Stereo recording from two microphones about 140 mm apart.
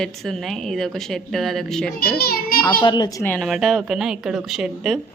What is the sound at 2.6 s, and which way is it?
Speech, 30° left (ahead or behind).